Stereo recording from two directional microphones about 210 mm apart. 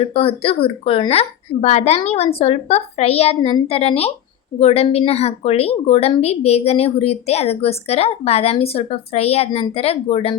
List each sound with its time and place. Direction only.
0.0 s a woman's voice: 25° left (ahead or behind)